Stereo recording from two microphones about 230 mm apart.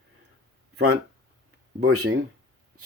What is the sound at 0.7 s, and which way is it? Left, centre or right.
Speech, right.